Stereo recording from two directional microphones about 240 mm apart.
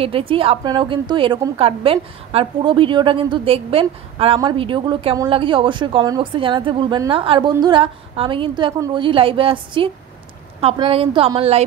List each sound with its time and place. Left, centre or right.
0.0 s a woman's voice: right